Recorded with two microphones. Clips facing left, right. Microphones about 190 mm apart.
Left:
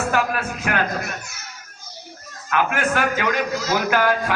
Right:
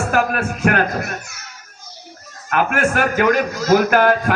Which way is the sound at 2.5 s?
50° right (ahead or behind).